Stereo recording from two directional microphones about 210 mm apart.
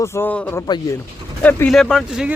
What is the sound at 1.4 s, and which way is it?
Speech, 10° left (ahead or behind).